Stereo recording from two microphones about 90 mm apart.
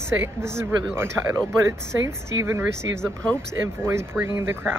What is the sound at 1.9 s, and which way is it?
Speech, 30° right (ahead or behind).